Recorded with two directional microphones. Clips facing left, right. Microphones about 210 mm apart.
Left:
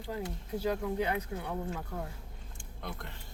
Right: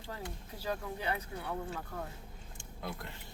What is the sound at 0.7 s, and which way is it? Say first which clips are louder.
Speech: left 4 dB; 15° left (ahead or behind).